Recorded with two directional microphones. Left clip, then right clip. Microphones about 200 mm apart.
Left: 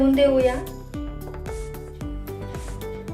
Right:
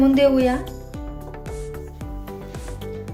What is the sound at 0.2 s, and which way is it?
Speech, 50° right (ahead or behind).